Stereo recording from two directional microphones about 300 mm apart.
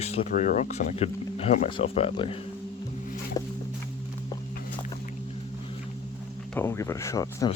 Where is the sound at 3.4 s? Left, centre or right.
Centre.